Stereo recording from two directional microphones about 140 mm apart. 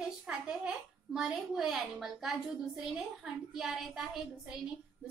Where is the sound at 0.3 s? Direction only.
5° right (ahead or behind).